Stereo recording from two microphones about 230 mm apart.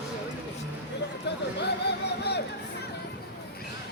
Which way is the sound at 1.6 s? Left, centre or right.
Left.